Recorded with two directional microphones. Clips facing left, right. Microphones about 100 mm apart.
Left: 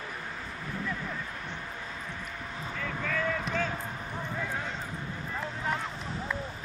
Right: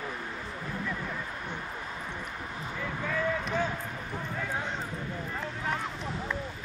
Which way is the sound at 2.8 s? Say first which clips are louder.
Right 1 dB; 15° right (ahead or behind).